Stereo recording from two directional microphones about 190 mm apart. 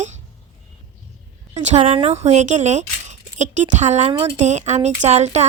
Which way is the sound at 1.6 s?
35° right (ahead or behind).